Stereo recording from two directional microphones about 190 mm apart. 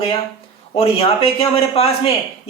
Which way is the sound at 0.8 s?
30° left (ahead or behind).